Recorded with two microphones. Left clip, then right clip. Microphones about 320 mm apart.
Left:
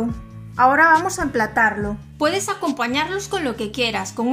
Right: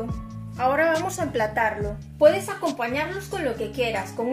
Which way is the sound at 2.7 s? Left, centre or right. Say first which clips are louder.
Left 5 dB; left.